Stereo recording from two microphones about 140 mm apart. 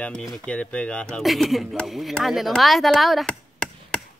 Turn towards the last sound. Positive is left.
turn(degrees=5)  # may be behind; listen again after turning